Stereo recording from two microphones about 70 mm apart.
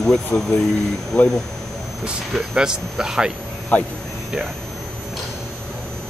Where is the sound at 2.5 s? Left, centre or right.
Centre.